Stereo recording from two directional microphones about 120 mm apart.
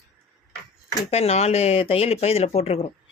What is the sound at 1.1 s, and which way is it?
Speech, 60° left (ahead or behind).